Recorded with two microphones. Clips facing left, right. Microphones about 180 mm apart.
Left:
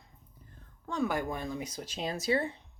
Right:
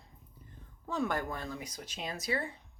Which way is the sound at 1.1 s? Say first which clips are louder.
Left 3 dB; 15° left (ahead or behind).